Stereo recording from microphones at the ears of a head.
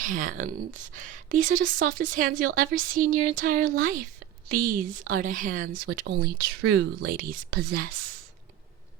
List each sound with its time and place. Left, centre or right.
0.0 s speech: right